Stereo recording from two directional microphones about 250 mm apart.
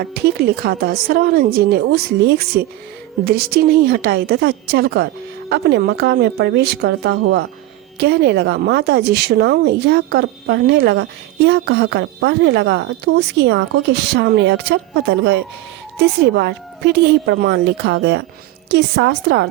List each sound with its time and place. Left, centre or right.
0.0 s speech: right